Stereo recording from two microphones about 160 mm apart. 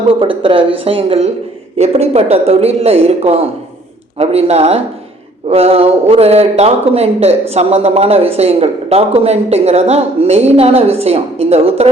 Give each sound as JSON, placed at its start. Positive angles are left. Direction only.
{"t": 0.2, "sound": "a man's voice", "side_deg": -35}